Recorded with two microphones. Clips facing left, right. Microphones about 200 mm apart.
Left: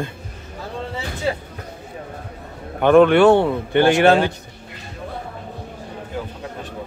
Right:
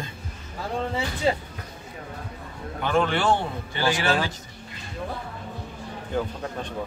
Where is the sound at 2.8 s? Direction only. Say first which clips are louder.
Left 12 dB; 60° left (ahead or behind).